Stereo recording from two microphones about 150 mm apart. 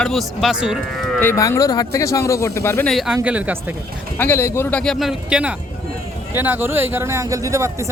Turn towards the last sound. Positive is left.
turn(degrees=-20)  # may be behind; listen again after turning